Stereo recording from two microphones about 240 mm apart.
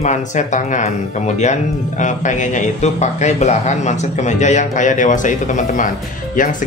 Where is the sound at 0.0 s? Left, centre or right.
Left.